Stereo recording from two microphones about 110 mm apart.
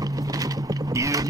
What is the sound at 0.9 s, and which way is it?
Boat, 30° right (ahead or behind).